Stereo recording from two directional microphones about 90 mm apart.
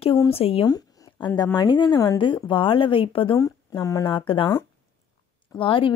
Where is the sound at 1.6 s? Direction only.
60° left (ahead or behind); by 3.3 s 85° left.